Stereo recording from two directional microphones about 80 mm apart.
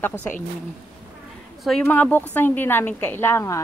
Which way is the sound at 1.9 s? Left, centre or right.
Left.